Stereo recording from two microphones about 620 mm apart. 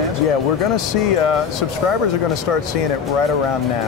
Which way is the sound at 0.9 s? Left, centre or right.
Left.